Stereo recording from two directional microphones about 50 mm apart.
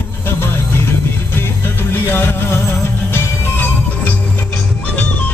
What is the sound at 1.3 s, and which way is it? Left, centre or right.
Music, left.